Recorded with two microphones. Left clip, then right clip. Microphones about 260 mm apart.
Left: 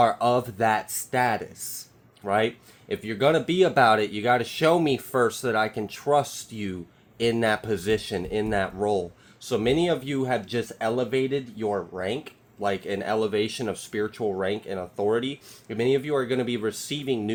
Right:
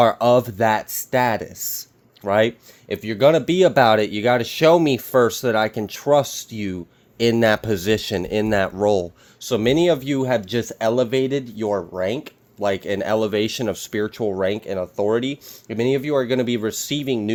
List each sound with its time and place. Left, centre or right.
0.0 s speech: right